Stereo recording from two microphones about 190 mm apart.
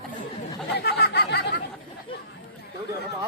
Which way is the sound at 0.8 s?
60° left (ahead or behind).